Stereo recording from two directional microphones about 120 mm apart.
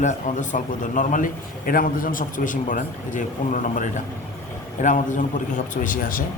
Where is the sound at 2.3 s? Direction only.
90° left.